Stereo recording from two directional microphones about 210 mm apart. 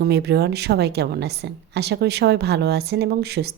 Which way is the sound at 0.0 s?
50° right (ahead or behind).